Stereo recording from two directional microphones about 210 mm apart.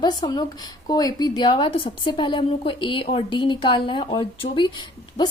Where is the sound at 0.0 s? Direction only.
20° left (ahead or behind).